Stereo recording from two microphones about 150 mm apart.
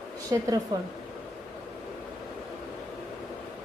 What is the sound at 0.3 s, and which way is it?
Speech, 20° right (ahead or behind).